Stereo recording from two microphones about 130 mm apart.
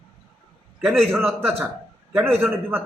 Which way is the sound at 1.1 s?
15° right (ahead or behind).